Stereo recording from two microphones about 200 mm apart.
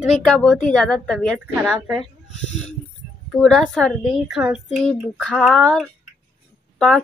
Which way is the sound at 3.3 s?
Centre (ahead or behind).